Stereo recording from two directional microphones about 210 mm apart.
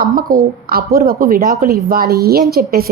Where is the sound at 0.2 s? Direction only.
45° right (ahead or behind).